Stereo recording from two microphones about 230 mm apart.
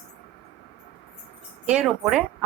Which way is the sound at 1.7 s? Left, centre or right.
Centre.